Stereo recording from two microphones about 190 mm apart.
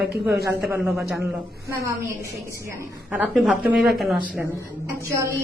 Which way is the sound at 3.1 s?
Centre (ahead or behind).